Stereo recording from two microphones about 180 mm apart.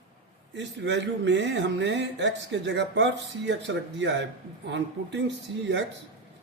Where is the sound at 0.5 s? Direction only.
75° right (ahead or behind).